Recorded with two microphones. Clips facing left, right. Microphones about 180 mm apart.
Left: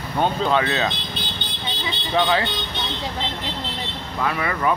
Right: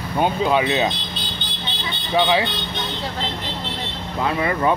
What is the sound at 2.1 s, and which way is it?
Speech, 10° right (ahead or behind).